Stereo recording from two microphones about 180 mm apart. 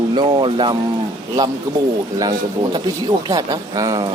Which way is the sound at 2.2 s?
20° right (ahead or behind).